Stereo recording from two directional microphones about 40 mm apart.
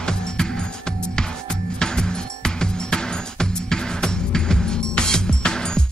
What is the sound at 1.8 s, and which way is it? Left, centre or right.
Music, centre.